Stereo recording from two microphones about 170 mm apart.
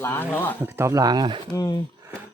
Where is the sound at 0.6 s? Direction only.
15° right (ahead or behind).